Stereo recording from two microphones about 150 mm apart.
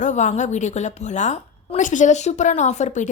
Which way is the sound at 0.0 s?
55° left (ahead or behind).